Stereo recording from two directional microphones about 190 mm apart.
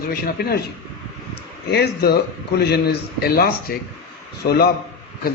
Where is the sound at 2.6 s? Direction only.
60° left (ahead or behind).